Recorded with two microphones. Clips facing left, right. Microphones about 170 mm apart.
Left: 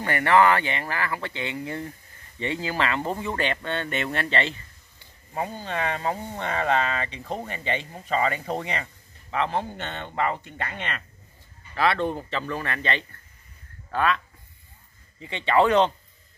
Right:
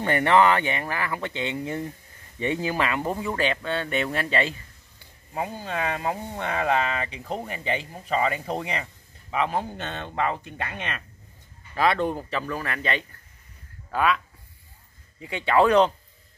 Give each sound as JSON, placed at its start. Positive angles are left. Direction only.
{"t": 0.0, "sound": "speech", "side_deg": -20}